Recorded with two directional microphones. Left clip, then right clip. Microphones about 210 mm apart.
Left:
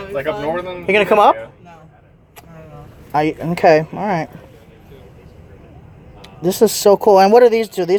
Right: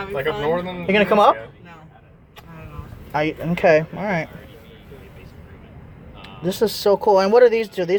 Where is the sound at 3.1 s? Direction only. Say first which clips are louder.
Left 5 dB; 25° left (ahead or behind).